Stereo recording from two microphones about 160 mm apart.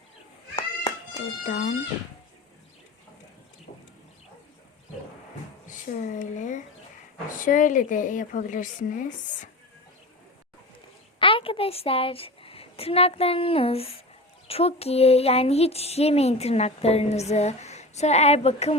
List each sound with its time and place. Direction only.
1.5 s speech: 70° left (ahead or behind)
3.7 s a sound: 55° left (ahead or behind)
5.6 s a woman's voice: 55° left (ahead or behind)
11.2 s a woman's voice: 35° left (ahead or behind)